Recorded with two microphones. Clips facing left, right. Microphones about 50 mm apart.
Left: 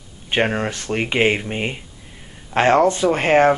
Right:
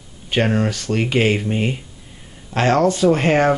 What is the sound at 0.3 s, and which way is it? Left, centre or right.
Speech, left.